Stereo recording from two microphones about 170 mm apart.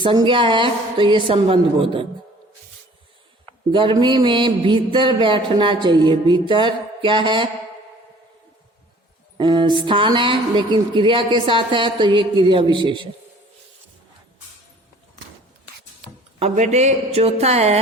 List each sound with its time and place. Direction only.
0.0 s a man's voice: 30° right (ahead or behind)
3.7 s a man's voice: 30° right (ahead or behind)
9.4 s a man's voice: 30° right (ahead or behind)
16.4 s speech: 40° right (ahead or behind)